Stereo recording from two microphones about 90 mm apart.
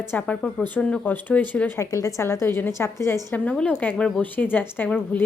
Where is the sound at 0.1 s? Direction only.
15° left (ahead or behind).